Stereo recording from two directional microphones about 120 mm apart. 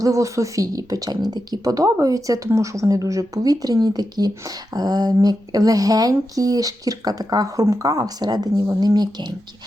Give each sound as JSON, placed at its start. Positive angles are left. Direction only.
{"t": 0.0, "sound": "speech", "side_deg": -25}